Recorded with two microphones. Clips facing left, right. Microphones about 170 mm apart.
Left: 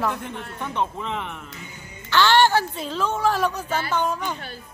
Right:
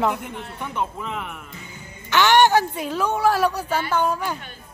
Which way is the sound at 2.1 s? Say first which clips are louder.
Right 2 dB; 15° right (ahead or behind).